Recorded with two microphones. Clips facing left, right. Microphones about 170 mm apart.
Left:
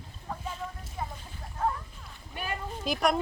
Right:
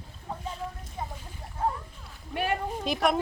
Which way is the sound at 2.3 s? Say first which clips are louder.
Right 7 dB; 70° right (ahead or behind).